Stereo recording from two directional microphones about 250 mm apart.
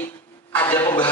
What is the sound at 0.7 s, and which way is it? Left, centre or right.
Speech, centre.